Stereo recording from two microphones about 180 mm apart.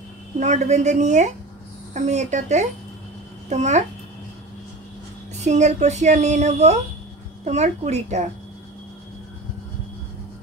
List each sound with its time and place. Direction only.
0.4 s speech: 40° right (ahead or behind)
5.4 s speech: 40° right (ahead or behind)